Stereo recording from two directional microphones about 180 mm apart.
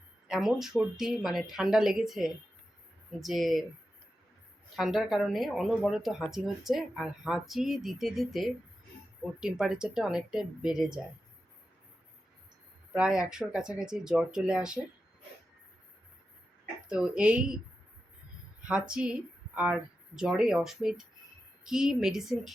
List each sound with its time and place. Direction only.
0.3 s speech: centre (ahead or behind)
4.8 s speech: centre (ahead or behind)
12.9 s speech: 5° right (ahead or behind)
16.9 s a woman's voice: 5° right (ahead or behind)
18.7 s speech: 5° right (ahead or behind)
20.1 s speech: 5° right (ahead or behind)